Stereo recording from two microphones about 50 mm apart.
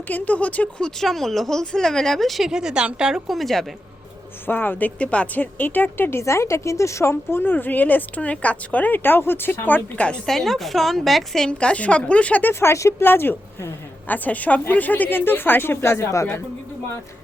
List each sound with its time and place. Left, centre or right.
0.1 s a woman's voice: left
0.8 s speech: centre
2.5 s a woman's voice: centre
3.2 s a woman's voice: centre
4.4 s a woman's voice: left
4.9 s a woman's voice: left
6.2 s a woman's voice: left
10.2 s a woman's voice: centre
11.4 s a woman's voice: left
12.5 s speech: left
13.0 s a woman's voice: left
14.1 s a woman's voice: left